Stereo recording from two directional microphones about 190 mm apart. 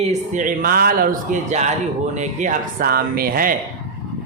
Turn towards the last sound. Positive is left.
turn(degrees=-50)  # may be behind; listen again after turning